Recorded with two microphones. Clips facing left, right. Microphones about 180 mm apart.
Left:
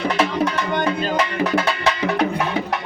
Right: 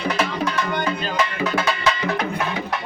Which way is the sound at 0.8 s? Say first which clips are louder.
Left 3 dB; 45° left (ahead or behind).